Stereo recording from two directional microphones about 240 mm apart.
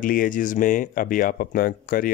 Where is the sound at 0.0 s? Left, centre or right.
Left.